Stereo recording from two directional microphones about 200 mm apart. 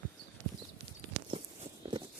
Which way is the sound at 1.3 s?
25° right (ahead or behind).